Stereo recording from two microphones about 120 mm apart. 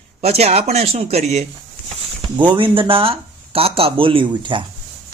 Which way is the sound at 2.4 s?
40° right (ahead or behind).